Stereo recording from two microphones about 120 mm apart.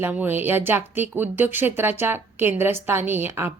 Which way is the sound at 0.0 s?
15° right (ahead or behind).